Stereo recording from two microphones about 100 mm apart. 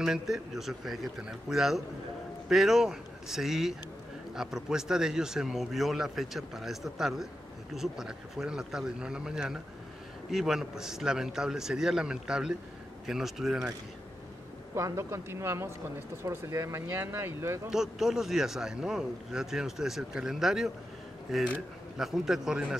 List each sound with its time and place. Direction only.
0.0 s a man's voice: 5° right (ahead or behind)
14.8 s speech: 30° right (ahead or behind)
17.6 s a man's voice: 5° right (ahead or behind)